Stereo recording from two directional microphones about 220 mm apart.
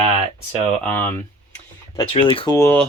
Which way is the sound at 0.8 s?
5° left (ahead or behind).